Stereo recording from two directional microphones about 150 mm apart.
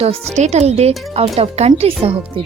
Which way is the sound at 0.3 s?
50° right (ahead or behind).